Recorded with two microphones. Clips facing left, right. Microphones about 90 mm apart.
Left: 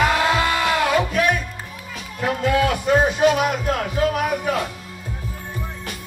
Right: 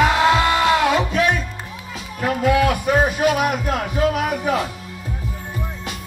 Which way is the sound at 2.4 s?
10° right (ahead or behind).